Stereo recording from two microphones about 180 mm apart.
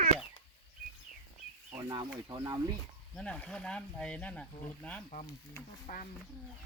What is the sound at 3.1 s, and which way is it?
Speech, 5° left (ahead or behind).